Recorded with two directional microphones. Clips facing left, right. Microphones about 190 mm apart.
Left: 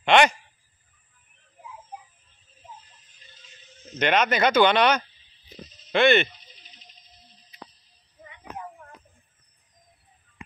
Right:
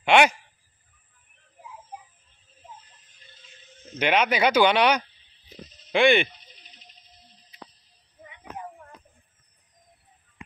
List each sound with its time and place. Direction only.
0.0 s speech: 10° right (ahead or behind)
4.0 s speech: 10° right (ahead or behind)